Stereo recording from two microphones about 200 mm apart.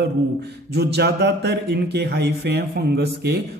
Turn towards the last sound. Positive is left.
turn(degrees=-55)  # may be behind; listen again after turning